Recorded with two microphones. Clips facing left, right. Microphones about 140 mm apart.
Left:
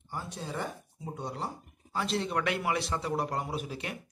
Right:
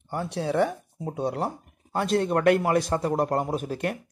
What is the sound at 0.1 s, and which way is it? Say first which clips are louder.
Speech: right 11 dB; 70° right (ahead or behind).